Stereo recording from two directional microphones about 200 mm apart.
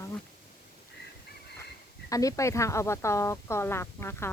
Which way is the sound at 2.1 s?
15° left (ahead or behind).